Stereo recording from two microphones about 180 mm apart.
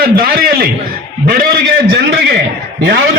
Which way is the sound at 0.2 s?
55° right (ahead or behind).